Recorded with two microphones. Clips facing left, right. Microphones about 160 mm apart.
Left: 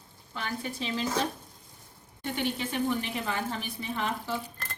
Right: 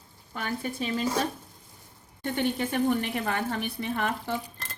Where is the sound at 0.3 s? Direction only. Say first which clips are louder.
Right 3 dB; 50° right (ahead or behind).